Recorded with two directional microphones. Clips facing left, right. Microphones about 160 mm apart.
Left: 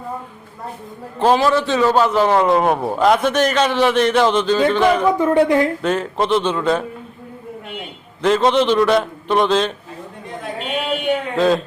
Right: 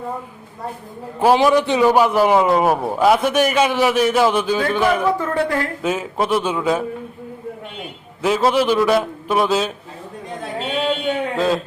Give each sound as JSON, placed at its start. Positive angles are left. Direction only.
{"t": 1.2, "sound": "a man's voice", "side_deg": -10}
{"t": 5.1, "sound": "a woman's voice", "side_deg": 20}
{"t": 5.8, "sound": "a man's voice", "side_deg": -5}
{"t": 8.2, "sound": "a man's voice", "side_deg": -5}
{"t": 11.3, "sound": "a man's voice", "side_deg": 0}